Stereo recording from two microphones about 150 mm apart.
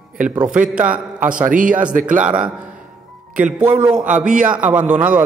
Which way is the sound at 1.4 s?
60° right (ahead or behind).